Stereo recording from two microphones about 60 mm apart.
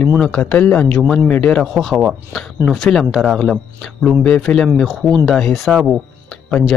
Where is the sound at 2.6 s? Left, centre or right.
Right.